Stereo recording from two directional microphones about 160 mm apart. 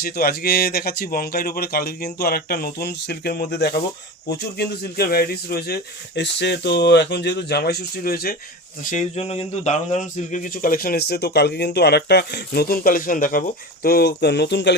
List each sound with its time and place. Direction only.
0.0 s speech: 70° left (ahead or behind)
8.8 s speech: 55° left (ahead or behind)
13.8 s speech: 80° left